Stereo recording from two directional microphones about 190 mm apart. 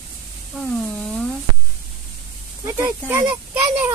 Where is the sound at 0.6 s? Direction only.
5° left (ahead or behind).